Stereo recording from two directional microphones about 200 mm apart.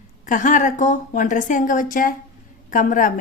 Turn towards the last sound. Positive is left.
turn(degrees=40)  # may be behind; listen again after turning